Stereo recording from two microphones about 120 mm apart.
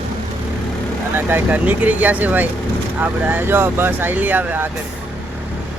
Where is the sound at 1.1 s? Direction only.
15° right (ahead or behind).